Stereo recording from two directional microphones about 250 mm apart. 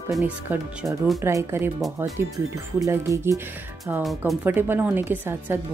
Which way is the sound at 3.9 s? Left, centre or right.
Centre.